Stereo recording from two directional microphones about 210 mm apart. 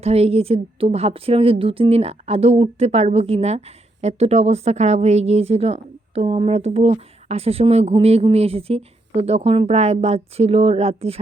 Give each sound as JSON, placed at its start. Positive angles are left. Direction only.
{"t": 0.0, "sound": "speech", "side_deg": -30}